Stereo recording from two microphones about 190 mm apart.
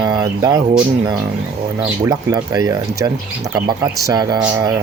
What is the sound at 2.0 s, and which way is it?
Speech, 20° right (ahead or behind).